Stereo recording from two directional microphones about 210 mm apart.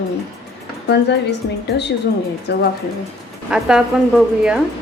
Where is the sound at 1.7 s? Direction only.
50° left (ahead or behind).